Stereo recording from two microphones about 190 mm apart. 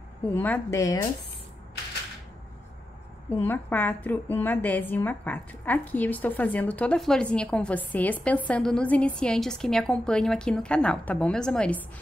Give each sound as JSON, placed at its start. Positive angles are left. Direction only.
{"t": 0.3, "sound": "a woman's voice", "side_deg": 10}
{"t": 3.3, "sound": "a woman's voice", "side_deg": 10}